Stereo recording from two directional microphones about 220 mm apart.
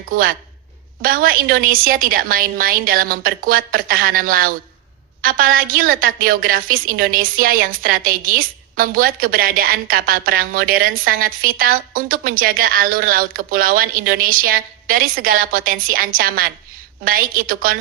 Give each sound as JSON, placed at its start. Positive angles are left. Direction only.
{"t": 0.1, "sound": "a woman's voice", "side_deg": -40}